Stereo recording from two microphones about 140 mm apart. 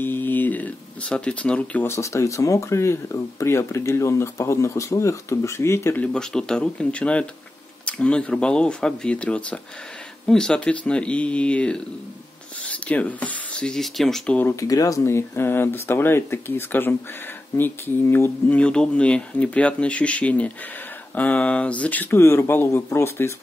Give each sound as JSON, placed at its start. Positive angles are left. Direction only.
{"t": 0.0, "sound": "speech", "side_deg": 15}
{"t": 6.1, "sound": "speech", "side_deg": 5}
{"t": 14.5, "sound": "speech", "side_deg": 25}